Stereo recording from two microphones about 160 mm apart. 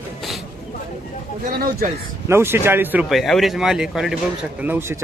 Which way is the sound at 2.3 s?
15° right (ahead or behind).